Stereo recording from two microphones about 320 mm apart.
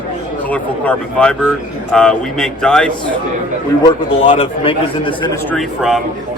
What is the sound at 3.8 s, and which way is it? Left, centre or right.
A man's voice, centre.